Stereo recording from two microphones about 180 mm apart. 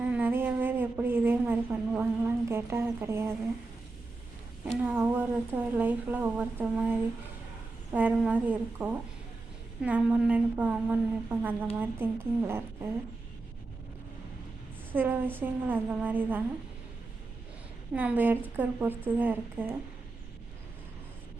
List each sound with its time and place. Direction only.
0.0 s a sound: 10° right (ahead or behind)
4.6 s a woman's voice: 5° right (ahead or behind)
14.9 s a woman's voice: 10° right (ahead or behind)
17.9 s a woman's voice: 10° right (ahead or behind)